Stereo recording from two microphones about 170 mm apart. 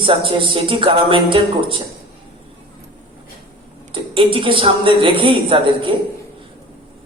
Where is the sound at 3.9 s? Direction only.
30° right (ahead or behind).